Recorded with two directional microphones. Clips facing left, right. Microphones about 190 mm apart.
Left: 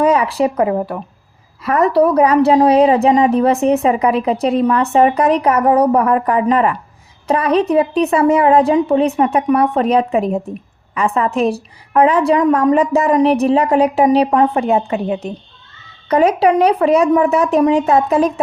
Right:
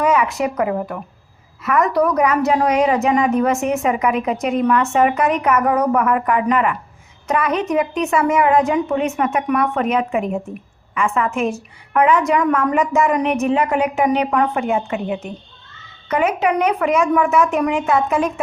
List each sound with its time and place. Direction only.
0.0 s a woman's voice: 35° left (ahead or behind)